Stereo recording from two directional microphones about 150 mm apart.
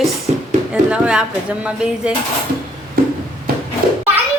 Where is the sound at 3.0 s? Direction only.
90° right.